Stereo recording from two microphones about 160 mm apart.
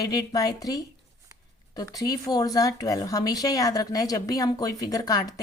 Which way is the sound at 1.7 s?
25° left (ahead or behind).